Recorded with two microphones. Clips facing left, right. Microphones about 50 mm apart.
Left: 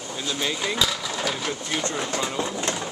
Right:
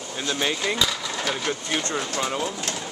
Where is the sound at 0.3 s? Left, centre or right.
Right.